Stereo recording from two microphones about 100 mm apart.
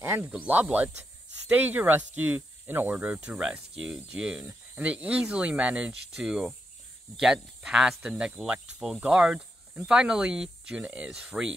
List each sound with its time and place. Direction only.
0.0 s snake: 20° right (ahead or behind)
0.3 s speech: 15° right (ahead or behind)